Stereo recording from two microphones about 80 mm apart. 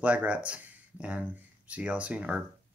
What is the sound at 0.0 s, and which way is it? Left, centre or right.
Speech, centre.